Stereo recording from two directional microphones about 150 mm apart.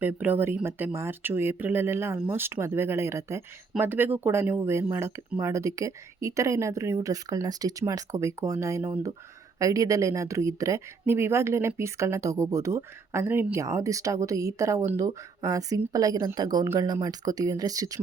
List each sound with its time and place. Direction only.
0.0 s speech: 10° right (ahead or behind)